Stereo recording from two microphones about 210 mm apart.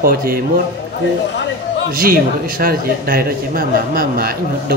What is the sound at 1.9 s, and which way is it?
A man's voice, 45° right (ahead or behind).